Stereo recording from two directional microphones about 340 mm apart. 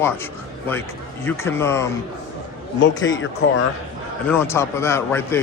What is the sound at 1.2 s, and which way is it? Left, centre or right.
Speech, centre.